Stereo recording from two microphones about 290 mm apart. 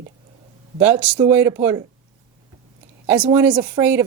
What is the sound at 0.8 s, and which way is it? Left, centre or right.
A woman's voice, centre.